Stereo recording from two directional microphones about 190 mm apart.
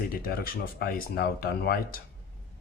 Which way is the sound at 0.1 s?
50° left (ahead or behind).